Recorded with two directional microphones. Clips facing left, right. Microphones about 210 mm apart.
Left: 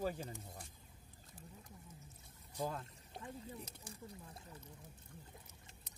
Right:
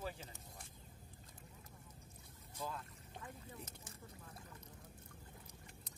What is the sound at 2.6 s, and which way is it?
Pour, 45° left (ahead or behind).